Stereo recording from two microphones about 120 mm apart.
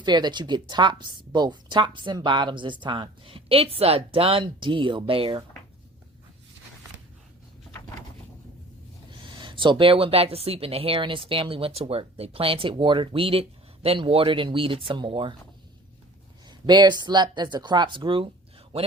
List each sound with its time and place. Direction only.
0.0 s a woman's voice: 40° right (ahead or behind)
9.0 s a woman's voice: 45° right (ahead or behind)
16.5 s speech: 35° right (ahead or behind)